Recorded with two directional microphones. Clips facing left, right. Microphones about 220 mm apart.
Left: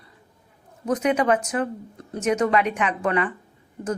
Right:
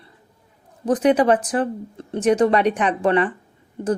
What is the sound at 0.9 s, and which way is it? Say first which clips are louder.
Speech: right 5 dB; 35° right (ahead or behind).